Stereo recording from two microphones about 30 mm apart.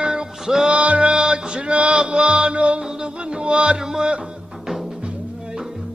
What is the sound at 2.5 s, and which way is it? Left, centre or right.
Music, right.